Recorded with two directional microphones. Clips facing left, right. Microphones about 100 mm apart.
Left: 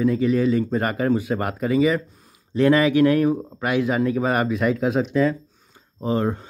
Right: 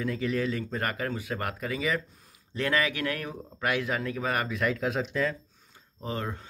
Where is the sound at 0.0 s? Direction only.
10° left (ahead or behind).